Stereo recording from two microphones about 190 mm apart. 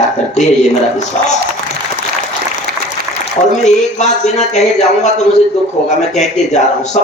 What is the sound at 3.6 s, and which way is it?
A man's voice, 40° left (ahead or behind).